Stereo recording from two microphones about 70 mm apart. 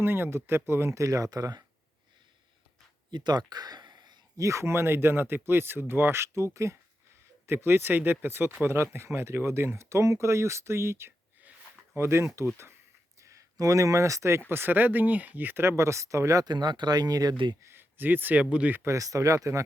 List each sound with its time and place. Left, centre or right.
0.0 s speech: right
3.1 s a sound: right
4.4 s speech: right
7.4 s speech: right
13.1 s speech: right
14.5 s speech: right
16.5 s speech: right
17.6 s speech: right
18.8 s speech: right